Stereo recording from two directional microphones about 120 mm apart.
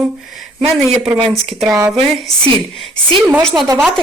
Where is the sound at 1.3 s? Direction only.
Centre (ahead or behind).